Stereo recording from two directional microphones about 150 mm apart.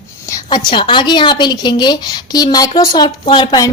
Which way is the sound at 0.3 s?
30° left (ahead or behind).